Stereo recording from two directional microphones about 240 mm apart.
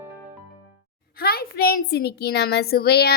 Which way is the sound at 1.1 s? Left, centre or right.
Left.